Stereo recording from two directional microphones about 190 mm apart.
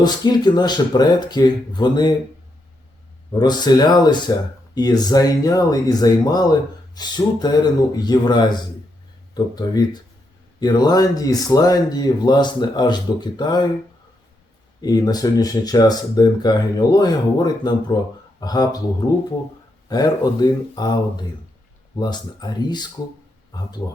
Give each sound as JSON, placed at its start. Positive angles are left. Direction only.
{"t": 0.0, "sound": "speech", "side_deg": 20}
{"t": 3.3, "sound": "speech", "side_deg": 20}
{"t": 14.8, "sound": "speech", "side_deg": 20}
{"t": 19.9, "sound": "speech", "side_deg": 20}